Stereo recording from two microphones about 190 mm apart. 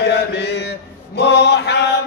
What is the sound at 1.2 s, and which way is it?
Mantra, 60° left (ahead or behind).